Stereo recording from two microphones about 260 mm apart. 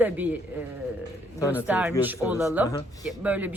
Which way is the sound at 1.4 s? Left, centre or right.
Centre.